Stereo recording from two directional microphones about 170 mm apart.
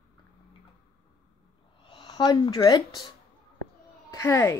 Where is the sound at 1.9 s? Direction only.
30° left (ahead or behind).